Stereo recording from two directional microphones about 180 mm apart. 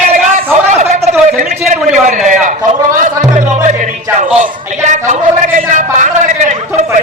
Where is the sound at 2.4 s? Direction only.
45° right (ahead or behind).